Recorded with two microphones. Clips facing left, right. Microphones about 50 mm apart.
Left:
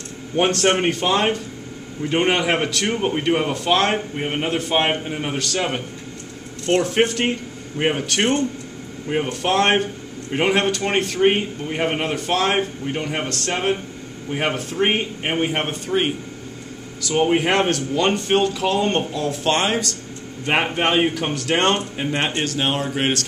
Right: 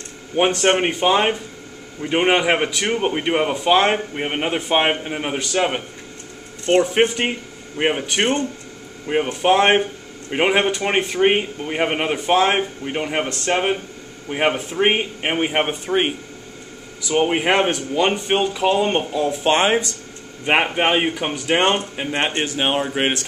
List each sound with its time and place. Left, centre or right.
0.4 s a man's voice: centre